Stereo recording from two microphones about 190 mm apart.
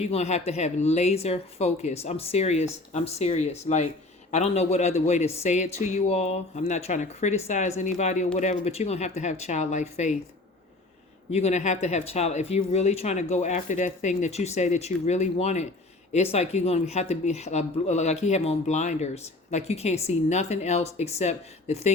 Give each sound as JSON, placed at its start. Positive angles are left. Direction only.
{"t": 0.0, "sound": "speech", "side_deg": 35}
{"t": 11.3, "sound": "speech", "side_deg": 35}